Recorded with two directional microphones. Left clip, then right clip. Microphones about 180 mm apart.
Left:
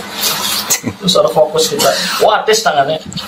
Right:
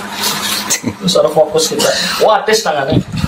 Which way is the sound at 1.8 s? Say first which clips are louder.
Left 1 dB; centre (ahead or behind).